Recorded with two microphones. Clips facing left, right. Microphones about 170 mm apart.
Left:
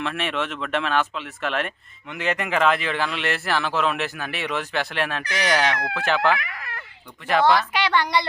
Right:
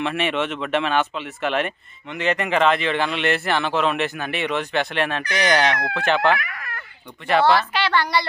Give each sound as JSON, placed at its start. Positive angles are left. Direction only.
{"t": 0.0, "sound": "speech", "side_deg": 0}
{"t": 7.7, "sound": "a child's voice", "side_deg": 15}